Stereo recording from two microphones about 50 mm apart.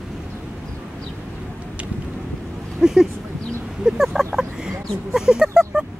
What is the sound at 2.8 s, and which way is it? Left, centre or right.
Speech, centre.